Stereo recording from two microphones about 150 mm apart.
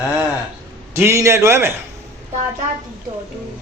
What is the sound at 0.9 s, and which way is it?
Speech, 20° right (ahead or behind).